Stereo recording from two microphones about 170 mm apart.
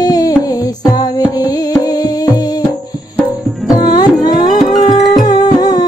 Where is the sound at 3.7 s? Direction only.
25° left (ahead or behind).